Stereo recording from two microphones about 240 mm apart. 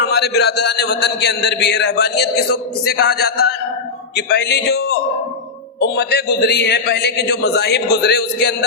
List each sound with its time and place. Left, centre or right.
0.0 s a man's voice: left